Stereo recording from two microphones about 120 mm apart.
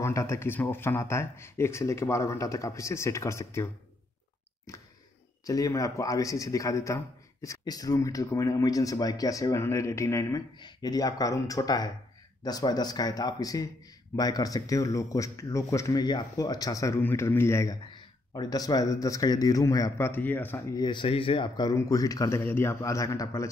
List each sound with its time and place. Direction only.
0.0 s speech: 25° left (ahead or behind)
5.5 s speech: 30° left (ahead or behind)
18.3 s speech: 35° left (ahead or behind)
20.1 s speech: 15° left (ahead or behind)
20.7 s speech: 40° left (ahead or behind)
21.7 s speech: 30° left (ahead or behind)
22.4 s speech: 20° left (ahead or behind)